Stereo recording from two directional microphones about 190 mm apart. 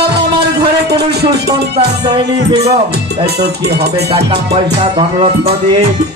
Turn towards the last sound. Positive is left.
turn(degrees=-30)  # may be behind; listen again after turning